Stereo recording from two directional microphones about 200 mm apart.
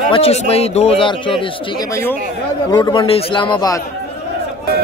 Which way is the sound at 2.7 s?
20° left (ahead or behind).